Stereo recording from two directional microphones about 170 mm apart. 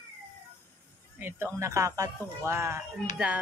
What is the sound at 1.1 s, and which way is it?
Speech, 15° right (ahead or behind).